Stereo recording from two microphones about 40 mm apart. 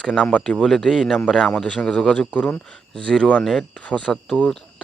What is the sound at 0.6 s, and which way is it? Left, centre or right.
Speech, centre.